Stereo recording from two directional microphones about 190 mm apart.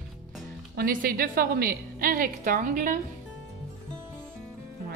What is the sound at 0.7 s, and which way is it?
A woman's voice, 50° right (ahead or behind).